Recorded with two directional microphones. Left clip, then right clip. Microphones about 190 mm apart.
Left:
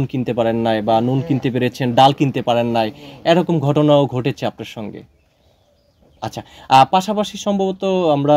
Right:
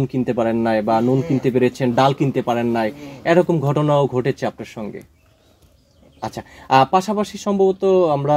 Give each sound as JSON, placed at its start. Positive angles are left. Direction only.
{"t": 0.0, "sound": "speech", "side_deg": 50}
{"t": 6.1, "sound": "speech", "side_deg": 55}